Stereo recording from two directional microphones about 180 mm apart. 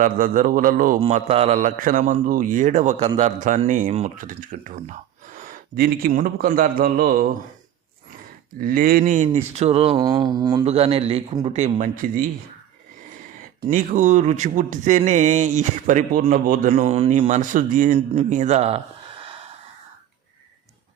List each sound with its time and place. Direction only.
0.0 s speech: 50° right (ahead or behind)
1.0 s speech: 35° right (ahead or behind); by 7.3 s 50° right (ahead or behind)
8.5 s speech: 50° right (ahead or behind); by 10.0 s 35° right (ahead or behind)
10.0 s a sound: 20° right (ahead or behind)
10.7 s speech: 35° right (ahead or behind); by 12.3 s 50° right (ahead or behind)
13.6 s speech: 45° right (ahead or behind); by 19.4 s 30° right (ahead or behind)